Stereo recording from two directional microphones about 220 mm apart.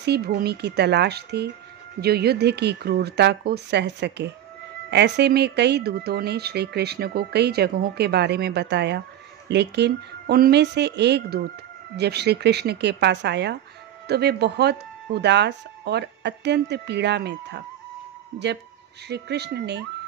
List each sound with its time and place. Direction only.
0.0 s speech: 45° right (ahead or behind)
19.0 s speech: 50° right (ahead or behind)